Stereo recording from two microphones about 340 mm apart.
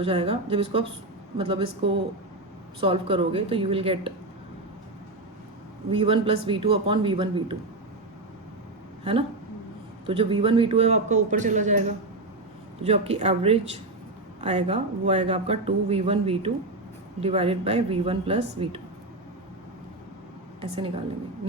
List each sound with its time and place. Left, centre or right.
0.0 s a man's voice: centre
5.9 s a man's voice: centre
10.1 s a man's voice: centre
20.6 s a man's voice: centre